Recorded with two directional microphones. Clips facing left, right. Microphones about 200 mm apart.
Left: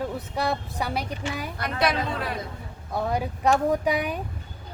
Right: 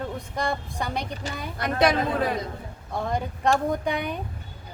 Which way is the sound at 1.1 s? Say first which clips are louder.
Left 2 dB; 35° right (ahead or behind).